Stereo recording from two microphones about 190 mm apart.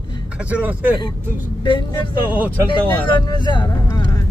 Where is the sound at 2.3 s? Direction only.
10° right (ahead or behind).